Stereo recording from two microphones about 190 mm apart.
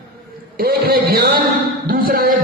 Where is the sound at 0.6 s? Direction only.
50° right (ahead or behind).